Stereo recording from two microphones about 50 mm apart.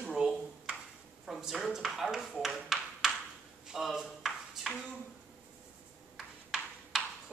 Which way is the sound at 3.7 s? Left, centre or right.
Centre.